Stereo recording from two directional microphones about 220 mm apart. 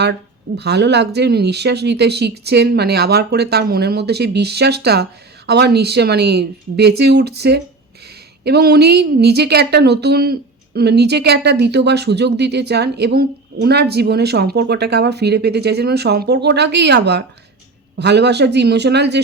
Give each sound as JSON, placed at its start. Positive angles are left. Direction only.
{"t": 0.0, "sound": "speech", "side_deg": -50}